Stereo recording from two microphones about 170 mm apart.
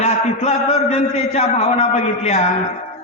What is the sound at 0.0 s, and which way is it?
A man's voice, 40° left (ahead or behind).